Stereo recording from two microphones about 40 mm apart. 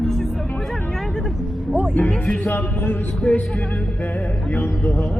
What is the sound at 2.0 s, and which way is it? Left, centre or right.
Music, left.